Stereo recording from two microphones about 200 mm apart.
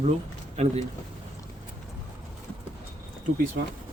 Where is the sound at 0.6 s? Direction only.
35° right (ahead or behind).